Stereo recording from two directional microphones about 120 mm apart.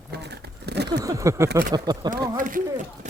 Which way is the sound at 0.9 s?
30° right (ahead or behind).